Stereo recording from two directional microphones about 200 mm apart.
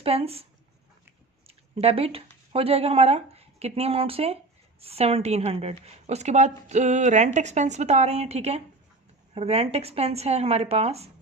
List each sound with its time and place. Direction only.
0.0 s speech: 30° right (ahead or behind)
1.8 s a woman's voice: 30° right (ahead or behind)